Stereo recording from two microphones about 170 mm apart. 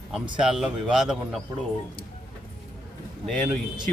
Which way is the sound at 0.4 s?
5° right (ahead or behind).